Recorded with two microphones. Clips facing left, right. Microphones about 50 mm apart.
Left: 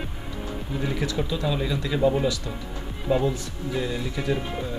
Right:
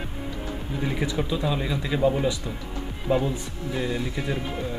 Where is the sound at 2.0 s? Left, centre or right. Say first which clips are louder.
Left 1 dB; centre.